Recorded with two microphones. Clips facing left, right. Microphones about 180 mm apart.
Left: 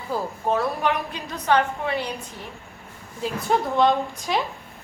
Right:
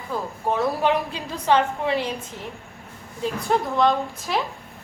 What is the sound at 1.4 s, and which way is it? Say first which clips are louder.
Speech: right 1 dB; 25° right (ahead or behind).